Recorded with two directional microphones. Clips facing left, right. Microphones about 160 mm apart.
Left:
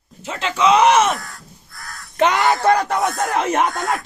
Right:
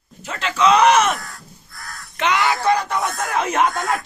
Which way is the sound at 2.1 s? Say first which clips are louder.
Left 3 dB; 45° left (ahead or behind).